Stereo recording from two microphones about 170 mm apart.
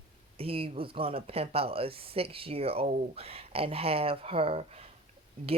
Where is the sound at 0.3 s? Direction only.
35° right (ahead or behind).